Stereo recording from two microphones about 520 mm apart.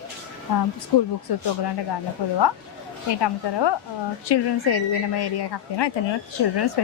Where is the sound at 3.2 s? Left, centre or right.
Left.